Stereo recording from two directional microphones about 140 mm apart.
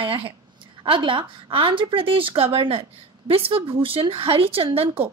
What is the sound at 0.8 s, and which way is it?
A woman's voice, 40° right (ahead or behind).